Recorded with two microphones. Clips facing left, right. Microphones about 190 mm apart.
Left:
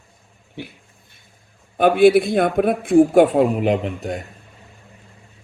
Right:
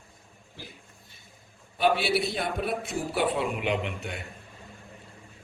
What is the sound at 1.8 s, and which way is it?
A man's voice, 50° left (ahead or behind).